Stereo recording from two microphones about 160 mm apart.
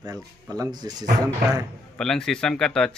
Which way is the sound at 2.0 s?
5° left (ahead or behind).